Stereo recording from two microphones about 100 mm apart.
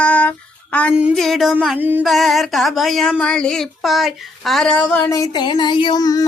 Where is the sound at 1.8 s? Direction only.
20° right (ahead or behind).